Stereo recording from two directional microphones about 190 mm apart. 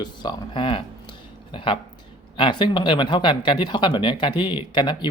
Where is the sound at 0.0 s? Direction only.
20° left (ahead or behind).